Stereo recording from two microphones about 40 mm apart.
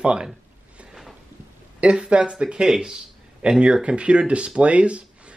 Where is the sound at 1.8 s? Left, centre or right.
Right.